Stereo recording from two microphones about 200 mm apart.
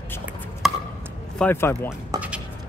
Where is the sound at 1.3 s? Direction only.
10° left (ahead or behind).